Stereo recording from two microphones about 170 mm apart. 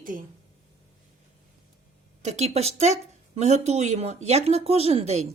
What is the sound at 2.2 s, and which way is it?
Speech, 40° right (ahead or behind).